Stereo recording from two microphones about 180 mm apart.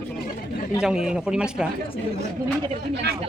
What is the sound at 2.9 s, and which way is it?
Speech, 70° right (ahead or behind).